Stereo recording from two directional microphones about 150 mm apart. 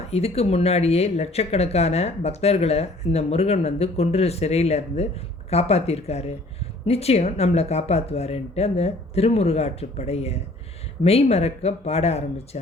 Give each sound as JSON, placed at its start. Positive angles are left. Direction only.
{"t": 0.1, "sound": "speech", "side_deg": 45}